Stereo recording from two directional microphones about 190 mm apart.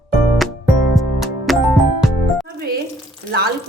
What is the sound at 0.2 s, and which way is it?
Music, centre (ahead or behind).